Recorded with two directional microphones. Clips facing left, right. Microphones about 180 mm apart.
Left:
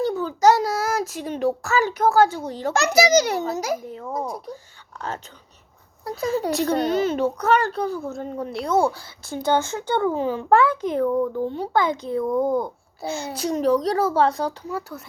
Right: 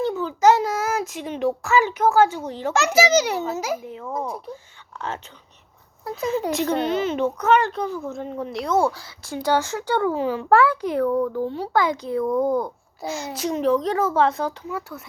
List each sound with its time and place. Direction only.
0.0 s a child's voice: 35° left (ahead or behind); by 11.9 s 15° left (ahead or behind)
12.2 s speech: centre (ahead or behind)
13.0 s a child's voice: 30° left (ahead or behind)